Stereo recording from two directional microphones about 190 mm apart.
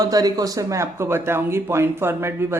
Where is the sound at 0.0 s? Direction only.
20° right (ahead or behind).